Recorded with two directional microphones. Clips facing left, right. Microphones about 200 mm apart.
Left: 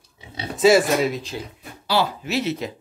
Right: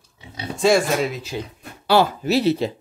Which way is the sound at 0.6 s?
5° left (ahead or behind).